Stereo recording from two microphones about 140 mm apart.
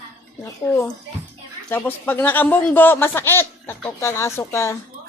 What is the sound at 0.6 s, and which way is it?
A woman's voice, 15° left (ahead or behind).